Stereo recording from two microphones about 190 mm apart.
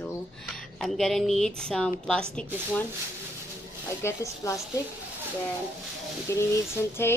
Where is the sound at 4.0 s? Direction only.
15° left (ahead or behind).